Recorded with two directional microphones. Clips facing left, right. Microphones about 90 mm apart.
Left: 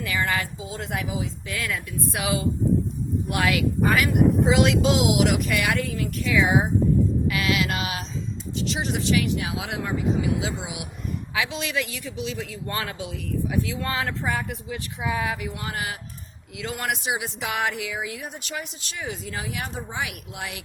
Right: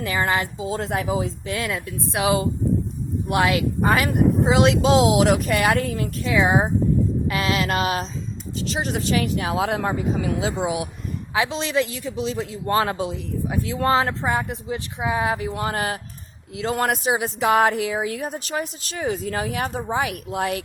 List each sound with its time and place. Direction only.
0.0 s a man's voice: 35° right (ahead or behind)
1.5 s a woman's voice: 25° right (ahead or behind); by 20.6 s 45° right (ahead or behind)